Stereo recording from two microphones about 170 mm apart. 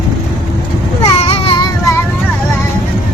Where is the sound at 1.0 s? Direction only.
35° left (ahead or behind).